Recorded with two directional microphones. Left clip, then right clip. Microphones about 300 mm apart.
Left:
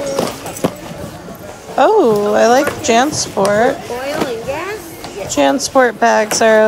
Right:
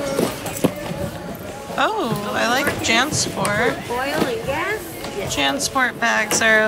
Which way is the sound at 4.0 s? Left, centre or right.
Centre.